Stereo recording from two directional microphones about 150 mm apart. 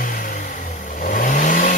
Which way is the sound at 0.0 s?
65° left (ahead or behind).